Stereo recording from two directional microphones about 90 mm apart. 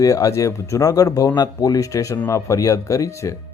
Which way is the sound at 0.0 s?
40° left (ahead or behind).